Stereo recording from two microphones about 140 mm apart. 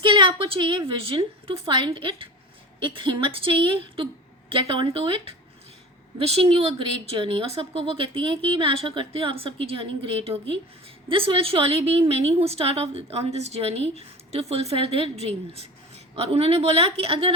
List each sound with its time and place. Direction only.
0.0 s a woman's voice: 35° right (ahead or behind)